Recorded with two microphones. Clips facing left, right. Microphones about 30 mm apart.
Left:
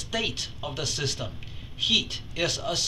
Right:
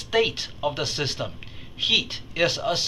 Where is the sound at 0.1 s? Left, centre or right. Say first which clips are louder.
Right 7 dB; right.